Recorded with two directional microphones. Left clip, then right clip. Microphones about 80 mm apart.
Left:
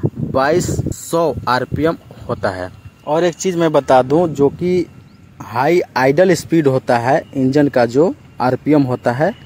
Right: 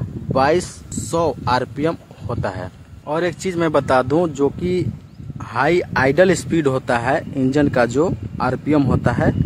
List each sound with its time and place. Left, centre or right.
0.3 s speech: left
3.1 s speech: left
4.6 s speech: left